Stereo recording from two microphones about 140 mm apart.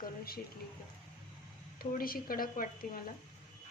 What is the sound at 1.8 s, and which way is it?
Speech, 90° left.